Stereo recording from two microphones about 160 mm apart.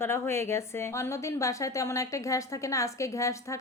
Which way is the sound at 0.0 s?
15° left (ahead or behind).